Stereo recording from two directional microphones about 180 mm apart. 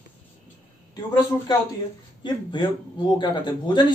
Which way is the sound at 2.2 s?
25° left (ahead or behind).